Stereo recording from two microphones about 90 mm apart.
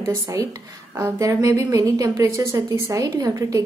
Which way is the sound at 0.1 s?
35° right (ahead or behind).